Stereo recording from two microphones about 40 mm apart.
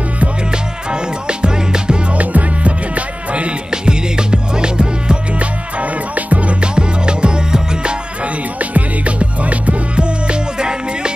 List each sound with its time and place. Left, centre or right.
1.2 s music: right
2.1 s music: right
3.3 s music: right
6.6 s music: right
8.5 s music: right